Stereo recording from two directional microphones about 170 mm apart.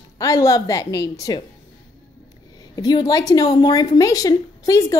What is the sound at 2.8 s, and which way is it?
A woman's voice, 20° left (ahead or behind).